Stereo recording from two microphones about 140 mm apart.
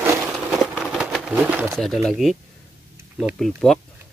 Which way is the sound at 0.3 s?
5° right (ahead or behind).